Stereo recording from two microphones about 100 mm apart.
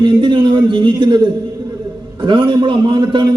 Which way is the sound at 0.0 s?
55° right (ahead or behind).